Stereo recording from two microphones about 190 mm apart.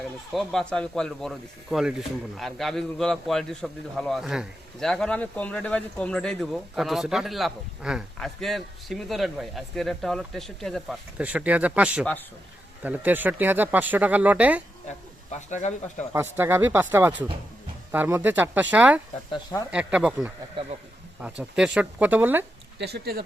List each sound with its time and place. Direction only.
0.3 s speech: 5° left (ahead or behind)
14.8 s speech: 40° left (ahead or behind)
16.1 s speech: 10° right (ahead or behind)
19.3 s speech: 20° left (ahead or behind)
19.7 s speech: 5° right (ahead or behind)
21.2 s speech: 5° right (ahead or behind)
22.8 s speech: 60° right (ahead or behind)